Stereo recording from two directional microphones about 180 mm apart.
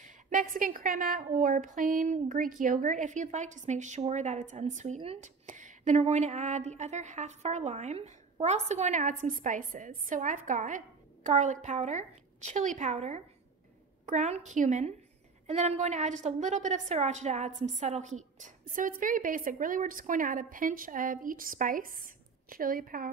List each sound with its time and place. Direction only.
0.0 s a woman's voice: 45° right (ahead or behind)